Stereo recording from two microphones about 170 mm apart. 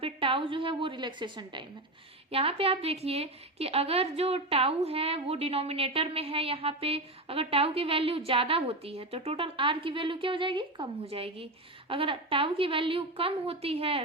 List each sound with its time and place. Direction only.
0.0 s a woman's voice: 30° right (ahead or behind)